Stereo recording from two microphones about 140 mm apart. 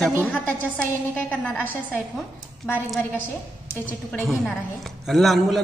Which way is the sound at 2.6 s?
15° left (ahead or behind).